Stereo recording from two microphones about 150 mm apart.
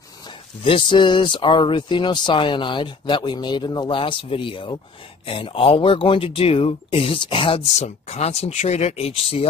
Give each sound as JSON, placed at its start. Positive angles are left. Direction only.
{"t": 0.7, "sound": "speech", "side_deg": 35}